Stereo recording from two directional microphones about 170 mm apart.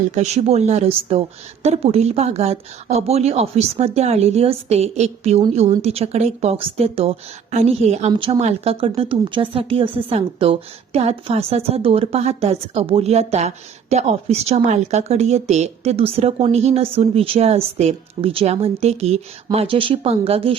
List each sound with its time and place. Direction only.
0.1 s speech: 40° right (ahead or behind)